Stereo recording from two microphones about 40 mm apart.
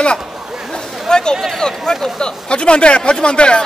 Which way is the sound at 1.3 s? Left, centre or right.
Centre.